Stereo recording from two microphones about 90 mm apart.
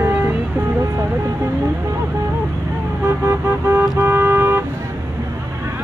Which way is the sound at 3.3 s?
30° right (ahead or behind).